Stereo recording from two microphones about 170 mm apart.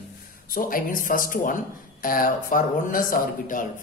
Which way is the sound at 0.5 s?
55° left (ahead or behind).